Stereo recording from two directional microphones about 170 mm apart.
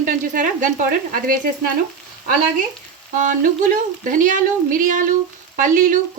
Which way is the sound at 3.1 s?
50° right (ahead or behind).